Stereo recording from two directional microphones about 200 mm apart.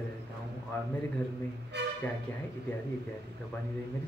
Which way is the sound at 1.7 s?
60° right (ahead or behind).